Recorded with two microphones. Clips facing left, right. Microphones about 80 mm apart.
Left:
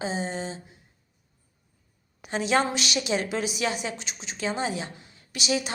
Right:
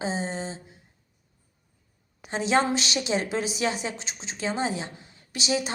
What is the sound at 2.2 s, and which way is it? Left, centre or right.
A woman's voice, right.